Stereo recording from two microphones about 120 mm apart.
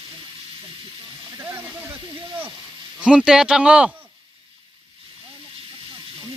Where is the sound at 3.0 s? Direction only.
10° right (ahead or behind).